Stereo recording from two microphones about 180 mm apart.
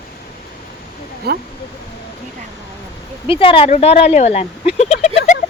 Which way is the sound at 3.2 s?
30° left (ahead or behind).